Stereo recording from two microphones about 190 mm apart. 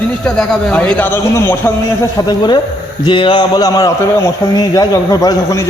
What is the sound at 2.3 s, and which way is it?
A man's voice, 20° left (ahead or behind).